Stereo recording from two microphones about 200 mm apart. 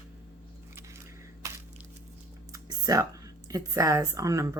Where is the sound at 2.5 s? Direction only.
20° right (ahead or behind).